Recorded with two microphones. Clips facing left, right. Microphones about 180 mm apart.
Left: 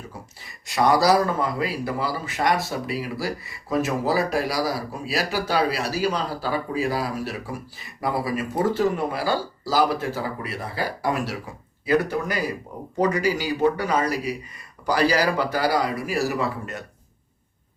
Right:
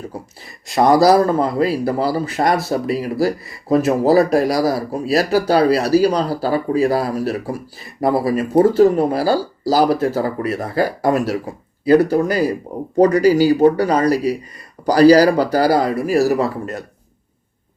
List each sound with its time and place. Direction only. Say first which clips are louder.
0.7 s a man's voice: right 6 dB; 40° right (ahead or behind)